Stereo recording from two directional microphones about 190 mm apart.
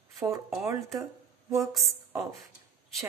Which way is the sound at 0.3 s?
Centre (ahead or behind).